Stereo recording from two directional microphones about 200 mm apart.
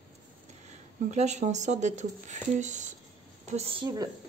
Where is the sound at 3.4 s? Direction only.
35° right (ahead or behind).